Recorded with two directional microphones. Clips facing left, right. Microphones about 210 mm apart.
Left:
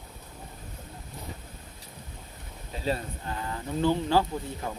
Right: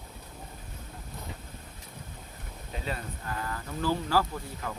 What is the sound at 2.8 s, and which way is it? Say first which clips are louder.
Speech: left 7 dB; 30° left (ahead or behind).